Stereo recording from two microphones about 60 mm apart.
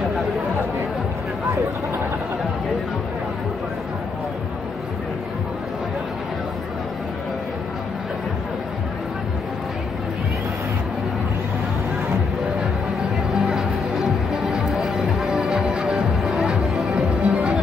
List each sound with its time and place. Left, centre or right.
13.5 s music: centre
17.2 s music: centre